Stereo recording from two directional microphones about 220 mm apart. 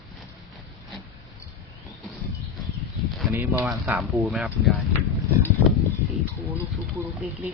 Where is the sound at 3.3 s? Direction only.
5° right (ahead or behind).